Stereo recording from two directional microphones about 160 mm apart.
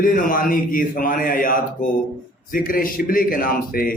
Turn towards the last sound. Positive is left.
turn(degrees=65)  # may be behind; listen again after turning